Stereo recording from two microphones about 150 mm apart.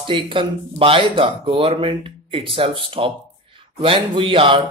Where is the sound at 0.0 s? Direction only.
35° right (ahead or behind).